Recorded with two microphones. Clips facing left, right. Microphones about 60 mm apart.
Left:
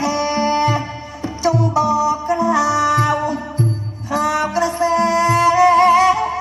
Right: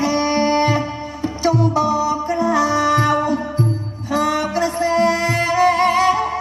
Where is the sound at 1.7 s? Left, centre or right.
Left.